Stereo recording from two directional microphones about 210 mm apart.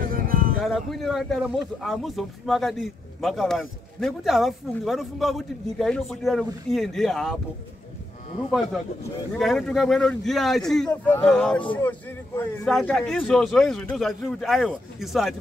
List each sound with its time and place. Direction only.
0.1 s a sound: 40° right (ahead or behind)
0.6 s speech: centre (ahead or behind)
8.5 s speech: centre (ahead or behind)